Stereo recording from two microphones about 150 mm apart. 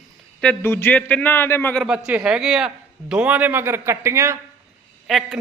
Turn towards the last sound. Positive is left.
turn(degrees=0)  # may be behind; listen again after turning